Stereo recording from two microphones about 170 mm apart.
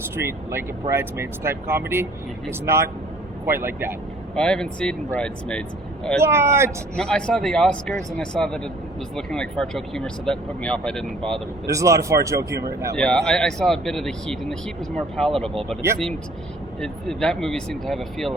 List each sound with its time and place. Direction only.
0.2 s speech: 15° right (ahead or behind)
4.4 s speech: 5° left (ahead or behind)
6.2 s speech: 15° right (ahead or behind)
6.9 s speech: 5° left (ahead or behind)
11.6 s speech: 20° right (ahead or behind)
13.0 s speech: 5° left (ahead or behind)